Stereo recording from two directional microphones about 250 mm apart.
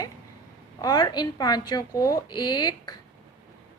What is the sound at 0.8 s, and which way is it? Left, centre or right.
A woman's voice, centre.